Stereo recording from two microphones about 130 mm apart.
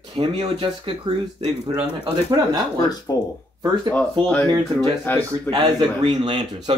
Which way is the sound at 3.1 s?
30° left (ahead or behind).